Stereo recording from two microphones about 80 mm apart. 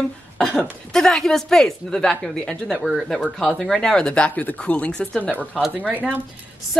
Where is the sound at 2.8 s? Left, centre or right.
Centre.